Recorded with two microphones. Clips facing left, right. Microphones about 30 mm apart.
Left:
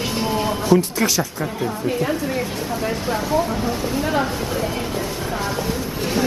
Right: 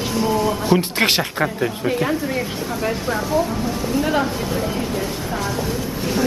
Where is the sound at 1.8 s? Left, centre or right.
Centre.